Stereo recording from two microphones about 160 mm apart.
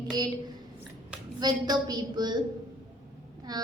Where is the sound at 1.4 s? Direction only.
25° right (ahead or behind).